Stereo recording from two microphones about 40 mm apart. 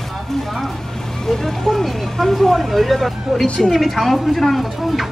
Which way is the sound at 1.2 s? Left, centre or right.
Centre.